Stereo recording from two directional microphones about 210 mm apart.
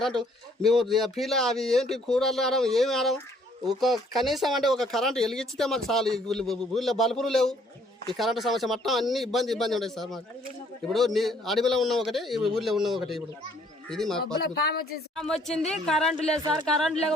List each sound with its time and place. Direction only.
0.0 s speech: centre (ahead or behind)
14.4 s speech: 50° left (ahead or behind)
15.1 s speech: centre (ahead or behind)